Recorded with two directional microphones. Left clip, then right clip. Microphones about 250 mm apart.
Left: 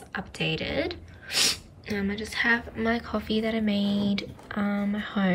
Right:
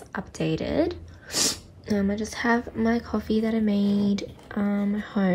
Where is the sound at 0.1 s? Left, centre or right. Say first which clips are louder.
Right 1 dB; centre.